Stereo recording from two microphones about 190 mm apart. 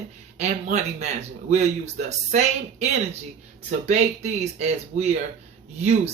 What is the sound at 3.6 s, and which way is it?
Speech, 35° right (ahead or behind).